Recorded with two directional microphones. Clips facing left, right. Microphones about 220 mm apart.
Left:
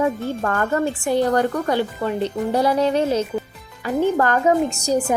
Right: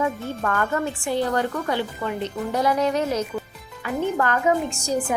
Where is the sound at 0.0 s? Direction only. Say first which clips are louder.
Left 4 dB; 35° left (ahead or behind).